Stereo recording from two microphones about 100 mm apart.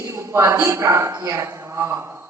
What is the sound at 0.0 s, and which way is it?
A woman's voice, 30° right (ahead or behind).